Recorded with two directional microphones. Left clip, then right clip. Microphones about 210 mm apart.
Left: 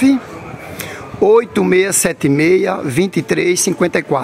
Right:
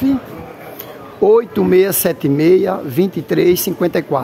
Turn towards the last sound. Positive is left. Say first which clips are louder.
# left 1 dB
turn(degrees=0)  # may be behind; listen again after turning